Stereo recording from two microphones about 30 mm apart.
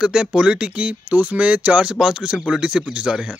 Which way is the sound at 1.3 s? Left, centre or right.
Right.